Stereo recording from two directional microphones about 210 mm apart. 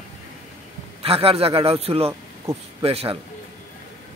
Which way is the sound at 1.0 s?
25° right (ahead or behind).